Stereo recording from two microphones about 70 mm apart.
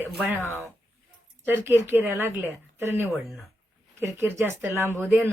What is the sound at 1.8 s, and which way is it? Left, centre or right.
Speech, right.